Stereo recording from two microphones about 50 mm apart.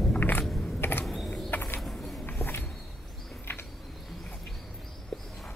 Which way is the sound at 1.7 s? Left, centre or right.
Centre.